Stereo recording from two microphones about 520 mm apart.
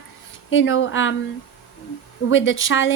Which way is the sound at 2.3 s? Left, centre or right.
Left.